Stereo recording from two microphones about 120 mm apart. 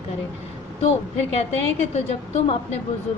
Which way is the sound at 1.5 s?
60° left (ahead or behind).